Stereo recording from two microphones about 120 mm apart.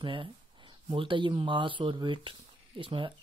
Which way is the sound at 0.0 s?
45° right (ahead or behind).